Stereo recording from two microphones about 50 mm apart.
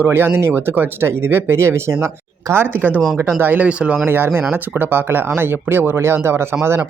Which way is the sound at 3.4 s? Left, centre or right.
Right.